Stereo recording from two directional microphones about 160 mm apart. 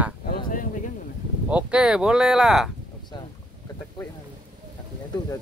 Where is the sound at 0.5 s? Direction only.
55° left (ahead or behind).